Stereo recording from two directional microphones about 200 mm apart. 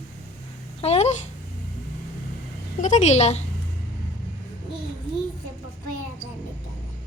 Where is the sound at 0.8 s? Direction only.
30° left (ahead or behind).